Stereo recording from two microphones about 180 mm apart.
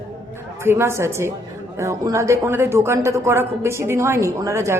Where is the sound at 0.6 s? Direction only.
15° right (ahead or behind).